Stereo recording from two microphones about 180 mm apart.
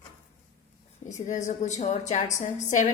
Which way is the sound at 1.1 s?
45° left (ahead or behind).